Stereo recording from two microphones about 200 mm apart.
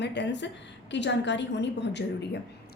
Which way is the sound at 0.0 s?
60° left (ahead or behind).